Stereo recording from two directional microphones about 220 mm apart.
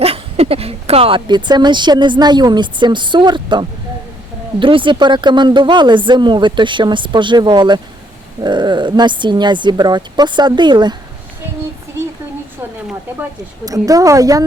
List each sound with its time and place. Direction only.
0.0 s speech: 25° right (ahead or behind)
13.7 s a woman's voice: 15° right (ahead or behind)